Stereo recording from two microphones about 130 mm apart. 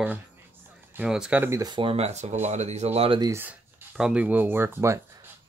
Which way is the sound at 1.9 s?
55° right (ahead or behind).